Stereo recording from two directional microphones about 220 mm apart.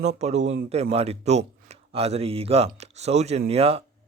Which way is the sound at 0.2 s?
30° right (ahead or behind).